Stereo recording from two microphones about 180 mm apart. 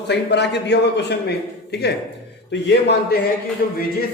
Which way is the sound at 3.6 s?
55° left (ahead or behind).